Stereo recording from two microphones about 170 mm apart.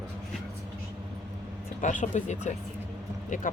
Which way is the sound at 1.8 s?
50° left (ahead or behind).